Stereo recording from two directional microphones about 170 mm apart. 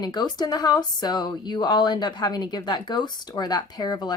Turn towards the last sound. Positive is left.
turn(degrees=25)  # may be behind; listen again after turning